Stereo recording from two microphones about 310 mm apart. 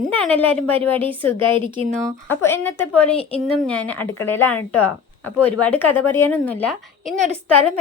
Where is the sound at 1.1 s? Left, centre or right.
Centre.